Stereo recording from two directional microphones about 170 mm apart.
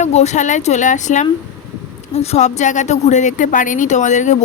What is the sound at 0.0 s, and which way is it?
Speech, 40° left (ahead or behind).